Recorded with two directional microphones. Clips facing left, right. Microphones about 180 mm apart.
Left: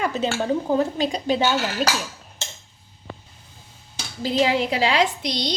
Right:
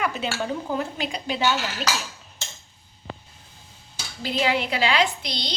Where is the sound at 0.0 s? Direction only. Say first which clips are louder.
Left 4 dB; 35° left (ahead or behind).